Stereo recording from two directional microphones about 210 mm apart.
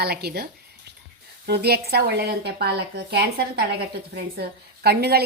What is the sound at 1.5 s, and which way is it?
A woman's voice, 50° right (ahead or behind).